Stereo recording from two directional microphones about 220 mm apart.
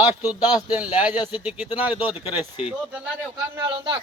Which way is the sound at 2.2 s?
25° left (ahead or behind).